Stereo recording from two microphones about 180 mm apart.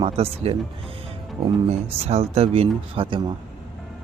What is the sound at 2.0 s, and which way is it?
Speech, 35° right (ahead or behind).